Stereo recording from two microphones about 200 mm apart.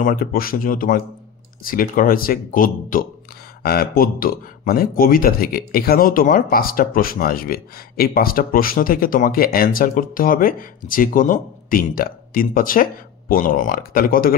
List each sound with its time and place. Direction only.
0.0 s speech: 45° left (ahead or behind)